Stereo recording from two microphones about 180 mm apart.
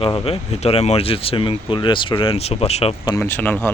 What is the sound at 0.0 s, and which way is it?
Speech, 30° left (ahead or behind).